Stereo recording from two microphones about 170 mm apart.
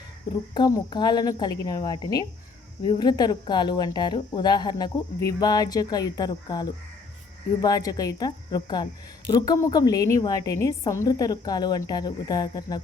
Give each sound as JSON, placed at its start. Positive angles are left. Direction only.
{"t": 0.5, "sound": "speech", "side_deg": 25}